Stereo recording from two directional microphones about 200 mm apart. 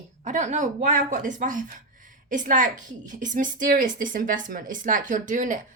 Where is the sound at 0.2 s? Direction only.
35° right (ahead or behind).